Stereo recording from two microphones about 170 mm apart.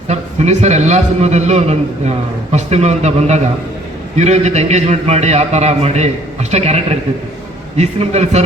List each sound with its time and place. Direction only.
0.1 s a man's voice: 40° right (ahead or behind)